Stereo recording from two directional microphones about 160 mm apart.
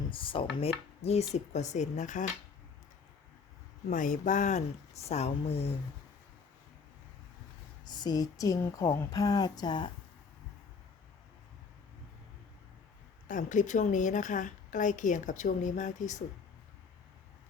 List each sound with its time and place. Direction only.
0.1 s chopping: 35° left (ahead or behind)
1.0 s a woman's voice: 40° left (ahead or behind)
3.8 s a woman's voice: 55° left (ahead or behind)
7.9 s speech: 25° left (ahead or behind)
13.2 s a woman's voice: 55° left (ahead or behind)